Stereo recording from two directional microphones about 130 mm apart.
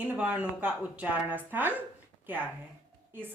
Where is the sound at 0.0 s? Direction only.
10° right (ahead or behind).